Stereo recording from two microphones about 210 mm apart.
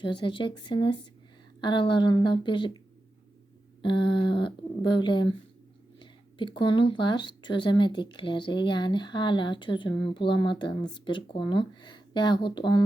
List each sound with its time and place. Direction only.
0.0 s speech: 20° left (ahead or behind)
3.8 s speech: 25° left (ahead or behind)